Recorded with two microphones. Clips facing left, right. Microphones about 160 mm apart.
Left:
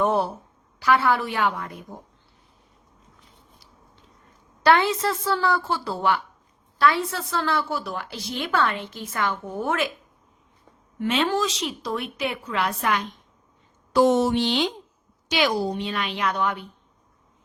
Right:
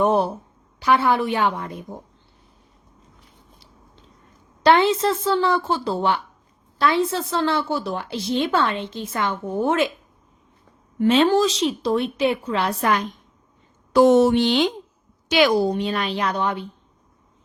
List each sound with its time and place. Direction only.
0.0 s a sound: 20° right (ahead or behind)
0.8 s a woman's voice: 20° right (ahead or behind)
4.6 s a woman's voice: 25° right (ahead or behind)
11.0 s a woman's voice: 35° right (ahead or behind)
13.9 s a woman's voice: 60° right (ahead or behind); by 16.6 s 30° right (ahead or behind)